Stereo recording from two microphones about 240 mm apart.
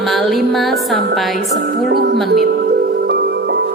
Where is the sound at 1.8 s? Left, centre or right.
Right.